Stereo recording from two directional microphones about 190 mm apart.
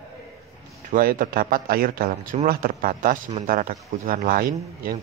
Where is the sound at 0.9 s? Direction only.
45° right (ahead or behind).